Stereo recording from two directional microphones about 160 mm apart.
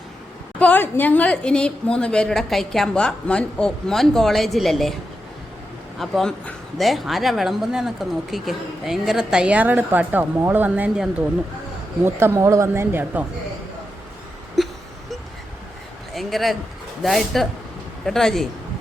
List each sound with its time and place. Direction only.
0.6 s speech: 10° left (ahead or behind)
6.0 s speech: centre (ahead or behind)
14.6 s wail: centre (ahead or behind)
16.1 s speech: centre (ahead or behind)